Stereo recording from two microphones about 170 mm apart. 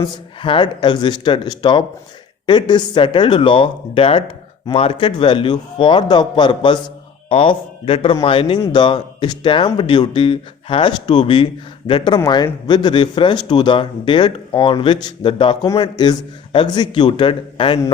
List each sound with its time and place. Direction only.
0.0 s a man's voice: 30° left (ahead or behind)